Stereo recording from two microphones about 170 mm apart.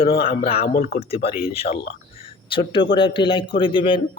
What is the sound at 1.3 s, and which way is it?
Speech, 60° left (ahead or behind).